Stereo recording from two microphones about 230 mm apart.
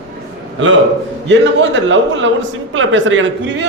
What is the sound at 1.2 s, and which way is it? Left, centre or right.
Speech, right.